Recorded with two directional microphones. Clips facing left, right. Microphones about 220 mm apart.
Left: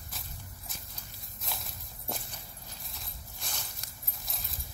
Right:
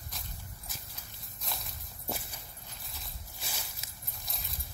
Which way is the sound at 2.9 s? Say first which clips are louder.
Left 1 dB; 5° right (ahead or behind).